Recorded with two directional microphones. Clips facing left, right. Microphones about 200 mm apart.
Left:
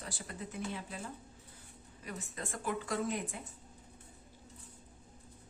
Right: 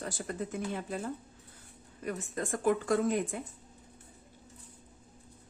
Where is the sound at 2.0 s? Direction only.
50° right (ahead or behind).